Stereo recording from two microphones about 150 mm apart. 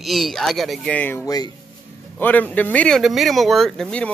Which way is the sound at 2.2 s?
10° left (ahead or behind).